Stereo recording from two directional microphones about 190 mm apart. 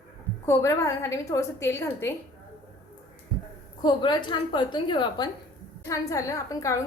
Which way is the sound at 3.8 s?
25° left (ahead or behind).